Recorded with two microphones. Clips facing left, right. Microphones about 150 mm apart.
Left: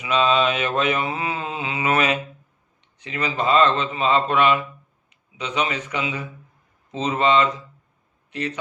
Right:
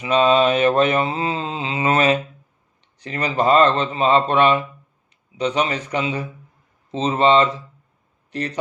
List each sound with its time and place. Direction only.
0.0 s mantra: 35° right (ahead or behind)
8.3 s speech: 40° right (ahead or behind)